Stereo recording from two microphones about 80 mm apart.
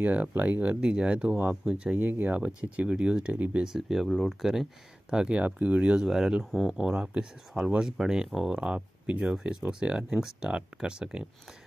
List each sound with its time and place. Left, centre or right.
0.0 s speech: right
2.0 s speech: right
3.3 s speech: right
3.6 s speech: centre
6.0 s speech: centre